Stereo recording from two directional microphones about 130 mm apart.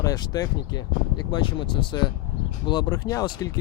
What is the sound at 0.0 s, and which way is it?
Speech, 30° left (ahead or behind).